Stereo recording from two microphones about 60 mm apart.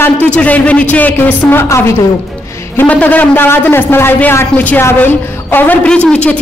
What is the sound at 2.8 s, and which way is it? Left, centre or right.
A man's voice, left.